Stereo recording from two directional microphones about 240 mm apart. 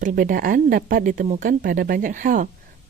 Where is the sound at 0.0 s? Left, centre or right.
Right.